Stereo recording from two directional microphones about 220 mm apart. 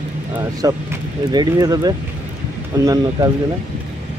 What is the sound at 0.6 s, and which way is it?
Speech, 15° right (ahead or behind).